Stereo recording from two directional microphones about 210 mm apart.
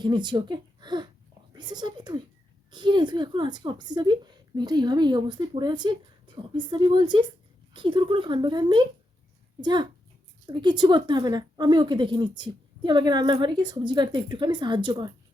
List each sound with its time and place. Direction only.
0.0 s a woman's voice: 20° right (ahead or behind)